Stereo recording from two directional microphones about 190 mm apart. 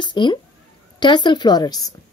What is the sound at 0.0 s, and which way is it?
A woman's voice, 25° left (ahead or behind).